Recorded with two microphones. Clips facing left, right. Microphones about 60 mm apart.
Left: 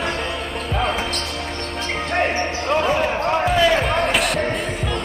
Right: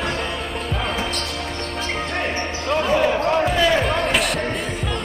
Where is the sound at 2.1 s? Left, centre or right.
Left.